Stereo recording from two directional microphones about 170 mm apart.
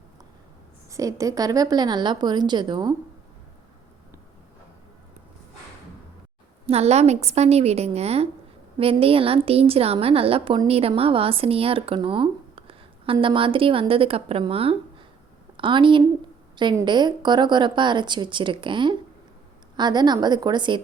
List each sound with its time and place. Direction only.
0.9 s speech: 20° right (ahead or behind)
6.7 s a woman's voice: 40° right (ahead or behind)